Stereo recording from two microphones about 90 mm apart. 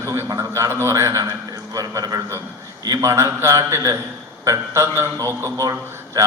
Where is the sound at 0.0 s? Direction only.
30° right (ahead or behind).